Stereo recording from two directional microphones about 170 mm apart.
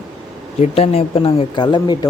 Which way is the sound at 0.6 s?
35° left (ahead or behind).